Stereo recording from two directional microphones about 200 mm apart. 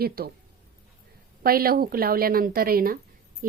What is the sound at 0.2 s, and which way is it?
Speech, 50° right (ahead or behind).